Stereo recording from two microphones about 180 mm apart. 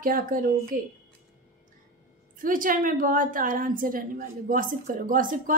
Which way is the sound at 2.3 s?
50° right (ahead or behind).